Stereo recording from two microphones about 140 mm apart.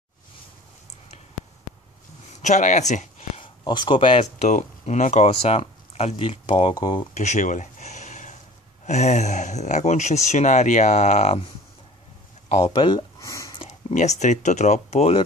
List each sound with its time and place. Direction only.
2.4 s speech: 60° left (ahead or behind)
3.3 s speech: 35° left (ahead or behind)
4.2 s speech: 55° left (ahead or behind)
6.7 s speech: 30° left (ahead or behind)
7.2 s a sound: 60° left (ahead or behind)
8.8 s speech: 55° left (ahead or behind)
12.4 s speech: 50° left (ahead or behind)
12.7 s speech: 35° left (ahead or behind)
13.2 s a sound: 25° left (ahead or behind)
13.7 s speech: 55° left (ahead or behind)